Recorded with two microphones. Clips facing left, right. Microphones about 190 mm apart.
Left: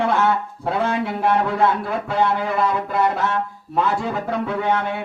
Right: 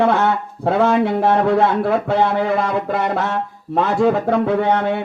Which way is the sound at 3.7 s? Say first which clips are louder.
Right 6 dB; 55° right (ahead or behind).